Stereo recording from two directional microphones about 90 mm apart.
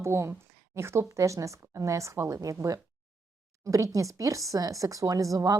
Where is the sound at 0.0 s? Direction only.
30° right (ahead or behind).